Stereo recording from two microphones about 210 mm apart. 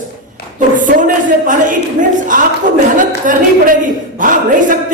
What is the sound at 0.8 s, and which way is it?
Speech, 40° right (ahead or behind).